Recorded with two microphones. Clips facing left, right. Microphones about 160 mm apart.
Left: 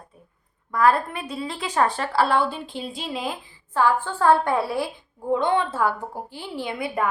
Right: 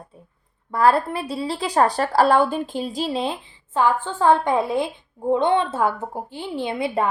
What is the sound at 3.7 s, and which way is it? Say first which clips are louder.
Speech: right 1 dB; 20° right (ahead or behind).